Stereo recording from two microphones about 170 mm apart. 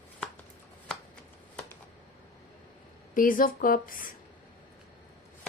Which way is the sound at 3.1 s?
55° left (ahead or behind).